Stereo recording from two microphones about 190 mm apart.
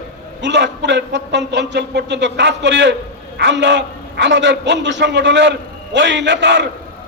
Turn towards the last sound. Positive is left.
turn(degrees=-65)  # may be behind; listen again after turning